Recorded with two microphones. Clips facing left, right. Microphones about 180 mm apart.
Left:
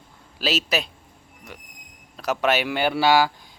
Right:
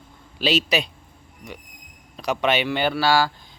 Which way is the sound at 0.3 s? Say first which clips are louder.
Right 3 dB; 5° left (ahead or behind).